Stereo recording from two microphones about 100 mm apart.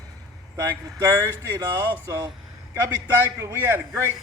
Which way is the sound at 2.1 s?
40° right (ahead or behind).